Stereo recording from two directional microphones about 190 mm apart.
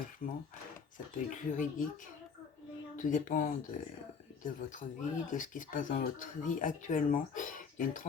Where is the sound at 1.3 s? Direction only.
45° left (ahead or behind).